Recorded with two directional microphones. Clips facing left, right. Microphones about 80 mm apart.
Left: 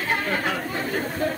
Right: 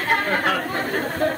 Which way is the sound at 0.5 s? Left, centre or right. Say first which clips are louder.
Right 3 dB; right.